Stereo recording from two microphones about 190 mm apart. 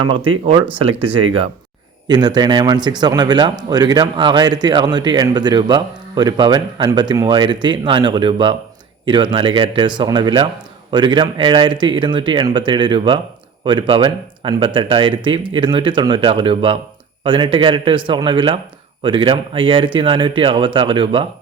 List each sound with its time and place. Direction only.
0.3 s speech: 25° right (ahead or behind)